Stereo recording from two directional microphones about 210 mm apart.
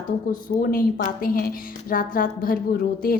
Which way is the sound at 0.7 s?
40° left (ahead or behind).